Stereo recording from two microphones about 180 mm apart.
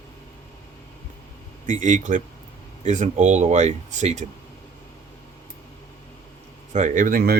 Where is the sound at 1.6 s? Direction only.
45° right (ahead or behind).